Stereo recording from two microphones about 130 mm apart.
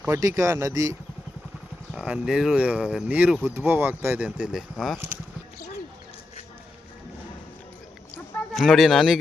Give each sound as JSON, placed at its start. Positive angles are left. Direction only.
{"t": 0.2, "sound": "speech", "side_deg": -25}
{"t": 2.0, "sound": "speech", "side_deg": -5}
{"t": 8.1, "sound": "fowl", "side_deg": 0}